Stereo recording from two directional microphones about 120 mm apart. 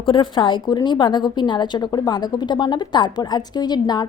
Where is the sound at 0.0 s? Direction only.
45° left (ahead or behind).